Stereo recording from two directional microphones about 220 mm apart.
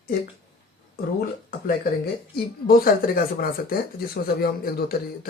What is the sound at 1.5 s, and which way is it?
Speech, 40° left (ahead or behind).